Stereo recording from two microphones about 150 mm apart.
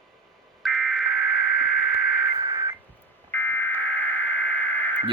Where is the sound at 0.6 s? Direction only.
Centre (ahead or behind).